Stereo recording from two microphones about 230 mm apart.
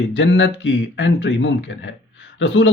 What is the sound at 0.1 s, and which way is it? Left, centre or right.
Speech, left.